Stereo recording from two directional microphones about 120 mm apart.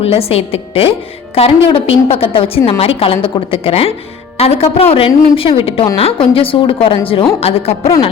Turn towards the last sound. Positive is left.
turn(degrees=60)  # may be behind; listen again after turning